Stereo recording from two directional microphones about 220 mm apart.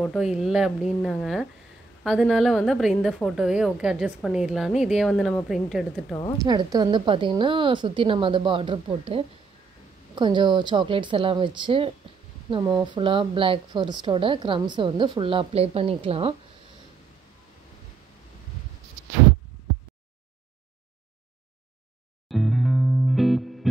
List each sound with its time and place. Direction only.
0.0 s a woman's voice: centre (ahead or behind)
6.4 s a woman's voice: 20° right (ahead or behind)
22.3 s music: centre (ahead or behind)